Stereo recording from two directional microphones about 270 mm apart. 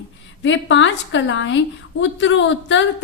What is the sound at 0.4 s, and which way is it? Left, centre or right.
A woman's voice, left.